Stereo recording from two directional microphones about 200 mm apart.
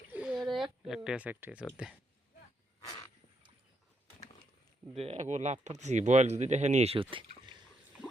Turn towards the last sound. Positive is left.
turn(degrees=-25)  # may be behind; listen again after turning